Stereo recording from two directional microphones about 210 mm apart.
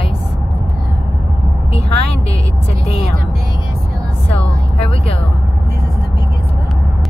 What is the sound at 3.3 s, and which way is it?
Vehicle, 45° right (ahead or behind).